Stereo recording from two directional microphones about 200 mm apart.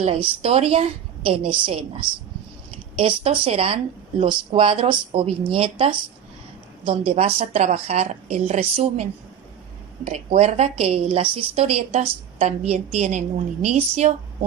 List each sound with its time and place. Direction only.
0.0 s speech: 30° right (ahead or behind)
3.0 s a woman's voice: 30° right (ahead or behind)